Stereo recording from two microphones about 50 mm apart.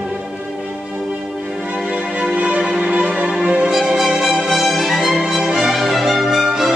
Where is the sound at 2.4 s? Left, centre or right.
Right.